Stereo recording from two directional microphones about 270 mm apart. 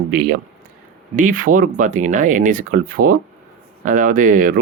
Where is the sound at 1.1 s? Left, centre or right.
Right.